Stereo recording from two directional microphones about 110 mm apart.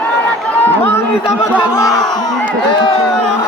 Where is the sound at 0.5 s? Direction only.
15° left (ahead or behind).